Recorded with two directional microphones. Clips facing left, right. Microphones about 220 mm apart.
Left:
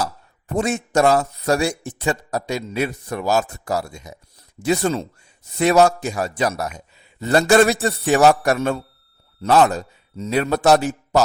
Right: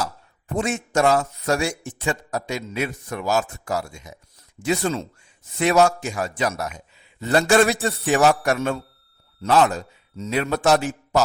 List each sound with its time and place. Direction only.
0.0 s speech: 40° left (ahead or behind)